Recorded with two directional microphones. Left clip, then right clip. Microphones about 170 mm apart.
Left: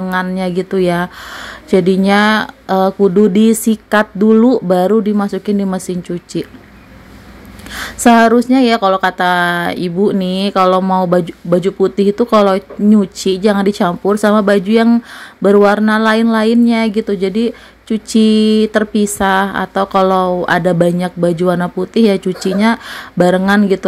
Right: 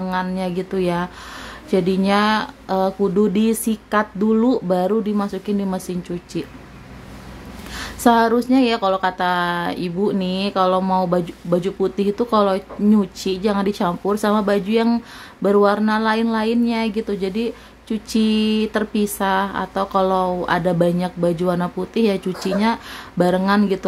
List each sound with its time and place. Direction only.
0.1 s speech: 30° left (ahead or behind)
7.7 s speech: 30° left (ahead or behind)